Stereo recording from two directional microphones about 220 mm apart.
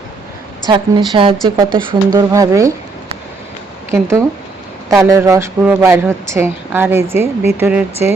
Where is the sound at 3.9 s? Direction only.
15° right (ahead or behind).